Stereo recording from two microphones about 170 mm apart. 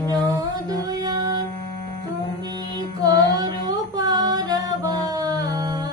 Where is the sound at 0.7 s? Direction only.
20° right (ahead or behind).